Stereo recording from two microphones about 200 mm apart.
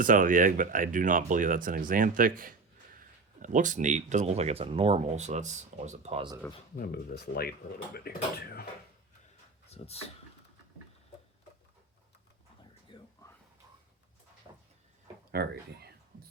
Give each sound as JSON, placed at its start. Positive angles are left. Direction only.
{"t": 0.0, "sound": "speech", "side_deg": -40}
{"t": 6.7, "sound": "speech", "side_deg": 50}
{"t": 9.6, "sound": "a sound", "side_deg": 30}
{"t": 12.9, "sound": "whispering", "side_deg": 25}
{"t": 15.3, "sound": "speech", "side_deg": -50}